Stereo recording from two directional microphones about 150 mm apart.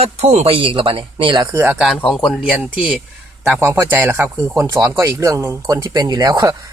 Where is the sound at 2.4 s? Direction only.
10° right (ahead or behind).